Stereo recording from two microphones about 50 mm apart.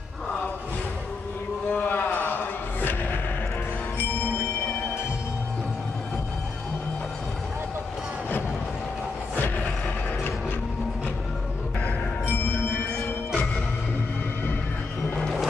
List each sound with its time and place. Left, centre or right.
1.7 s music: left
9.3 s music: left
12.3 s music: left